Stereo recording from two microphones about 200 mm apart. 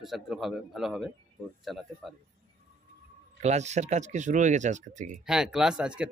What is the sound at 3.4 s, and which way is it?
Speech, 35° right (ahead or behind).